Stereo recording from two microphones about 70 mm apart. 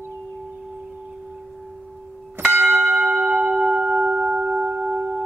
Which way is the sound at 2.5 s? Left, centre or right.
Right.